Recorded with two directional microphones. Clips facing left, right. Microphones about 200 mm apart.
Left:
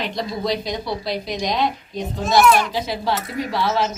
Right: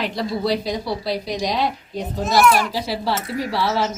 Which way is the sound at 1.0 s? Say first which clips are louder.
Right 1 dB; 35° right (ahead or behind).